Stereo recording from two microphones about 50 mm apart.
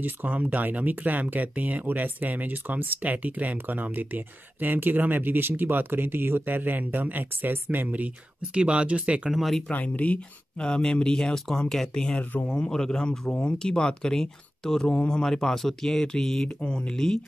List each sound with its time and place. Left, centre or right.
0.0 s speech: right
8.5 s speech: right
9.3 s speech: centre
9.7 s speech: left; by 13.3 s centre
13.3 s speech: left